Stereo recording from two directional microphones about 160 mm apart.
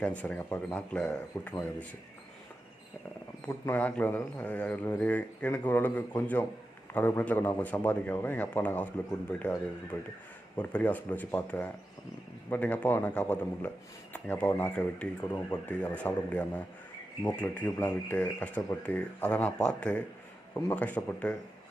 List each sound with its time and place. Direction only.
0.0 s speech: 10° left (ahead or behind)
3.4 s speech: 10° left (ahead or behind)
9.9 s speech: 15° left (ahead or behind)